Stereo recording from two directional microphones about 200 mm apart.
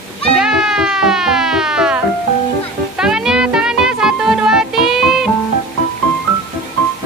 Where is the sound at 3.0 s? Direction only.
5° right (ahead or behind).